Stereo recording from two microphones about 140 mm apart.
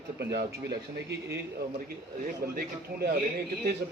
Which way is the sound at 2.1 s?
90° right.